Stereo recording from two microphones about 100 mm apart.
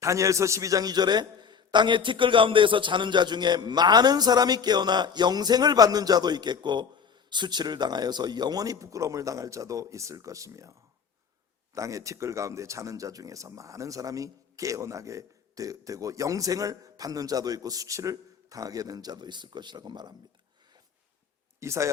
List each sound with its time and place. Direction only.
0.0 s a man's voice: 30° right (ahead or behind)
21.6 s speech: 30° right (ahead or behind)